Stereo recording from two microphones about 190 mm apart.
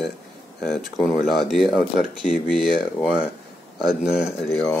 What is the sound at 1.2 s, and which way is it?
Speech, centre (ahead or behind).